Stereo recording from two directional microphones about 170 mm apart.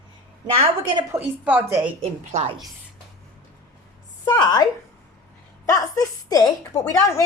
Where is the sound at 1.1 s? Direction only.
10° right (ahead or behind).